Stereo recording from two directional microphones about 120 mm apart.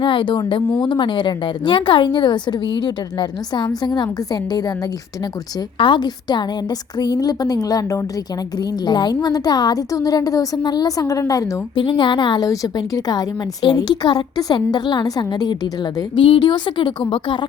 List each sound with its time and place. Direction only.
0.0 s a woman's voice: 45° left (ahead or behind); by 11.6 s 30° left (ahead or behind)
11.7 s a woman's voice: 40° left (ahead or behind)